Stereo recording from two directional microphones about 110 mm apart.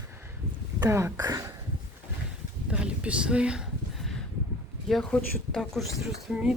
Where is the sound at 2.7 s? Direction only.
10° right (ahead or behind).